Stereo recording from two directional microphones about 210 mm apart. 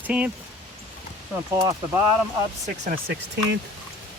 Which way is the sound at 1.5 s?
15° right (ahead or behind).